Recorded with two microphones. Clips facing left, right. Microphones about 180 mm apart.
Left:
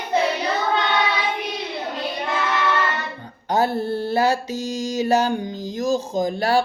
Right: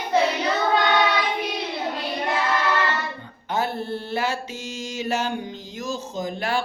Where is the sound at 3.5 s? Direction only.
40° left (ahead or behind).